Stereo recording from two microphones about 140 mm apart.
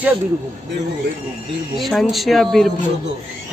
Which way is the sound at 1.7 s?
Centre (ahead or behind).